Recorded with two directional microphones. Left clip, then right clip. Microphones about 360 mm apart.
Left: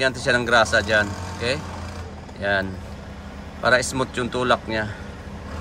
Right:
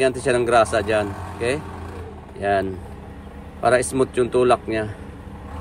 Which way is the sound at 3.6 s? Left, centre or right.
Centre.